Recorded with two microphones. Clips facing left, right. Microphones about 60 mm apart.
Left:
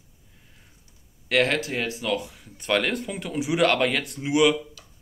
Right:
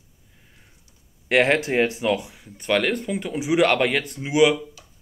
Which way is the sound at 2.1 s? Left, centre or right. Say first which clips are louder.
Right 1 dB; centre.